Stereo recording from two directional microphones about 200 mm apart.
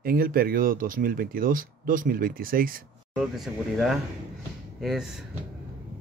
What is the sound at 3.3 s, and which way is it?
Speech, centre (ahead or behind).